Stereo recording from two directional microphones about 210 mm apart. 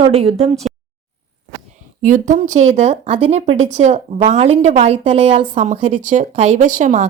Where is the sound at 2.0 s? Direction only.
40° right (ahead or behind).